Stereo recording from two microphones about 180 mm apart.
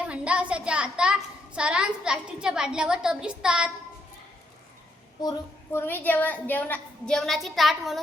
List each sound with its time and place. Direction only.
0.0 s a child's voice: 5° right (ahead or behind)
5.2 s child singing: 25° left (ahead or behind)
5.7 s a woman's voice: 10° left (ahead or behind)